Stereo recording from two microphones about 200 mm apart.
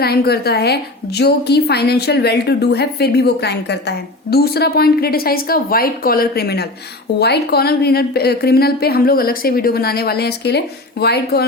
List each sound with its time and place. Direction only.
0.0 s a woman's voice: 50° left (ahead or behind)